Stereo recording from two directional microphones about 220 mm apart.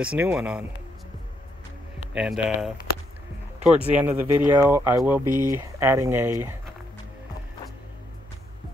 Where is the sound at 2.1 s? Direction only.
5° right (ahead or behind).